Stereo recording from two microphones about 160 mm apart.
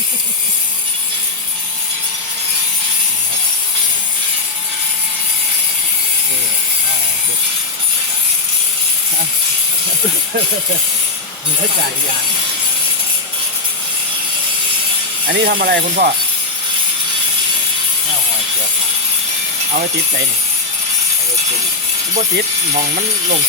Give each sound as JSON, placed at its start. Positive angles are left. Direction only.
{"t": 15.3, "sound": "speech", "side_deg": -85}